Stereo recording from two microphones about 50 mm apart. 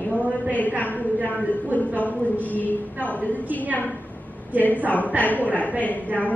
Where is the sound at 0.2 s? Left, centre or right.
Right.